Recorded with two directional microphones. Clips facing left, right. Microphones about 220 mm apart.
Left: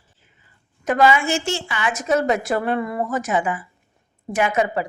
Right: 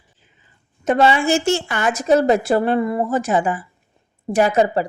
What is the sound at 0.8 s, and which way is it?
A woman's voice, 30° right (ahead or behind).